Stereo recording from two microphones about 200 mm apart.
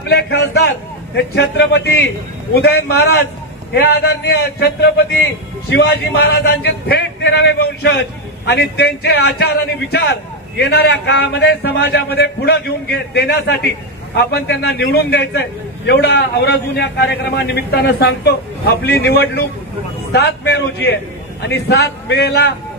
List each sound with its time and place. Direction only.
0.1 s a man's voice: 55° left (ahead or behind)